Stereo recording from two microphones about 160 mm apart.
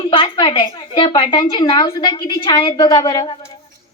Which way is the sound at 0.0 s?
35° left (ahead or behind).